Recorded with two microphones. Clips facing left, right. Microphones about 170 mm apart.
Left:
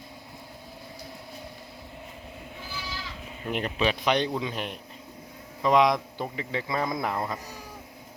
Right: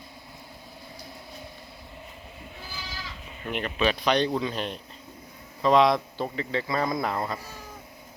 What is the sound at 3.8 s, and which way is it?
Speech, 15° left (ahead or behind).